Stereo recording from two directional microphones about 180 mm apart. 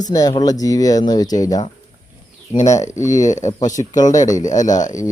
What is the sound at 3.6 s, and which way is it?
Speech, 20° left (ahead or behind).